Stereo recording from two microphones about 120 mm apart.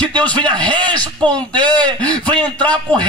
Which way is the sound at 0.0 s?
10° left (ahead or behind).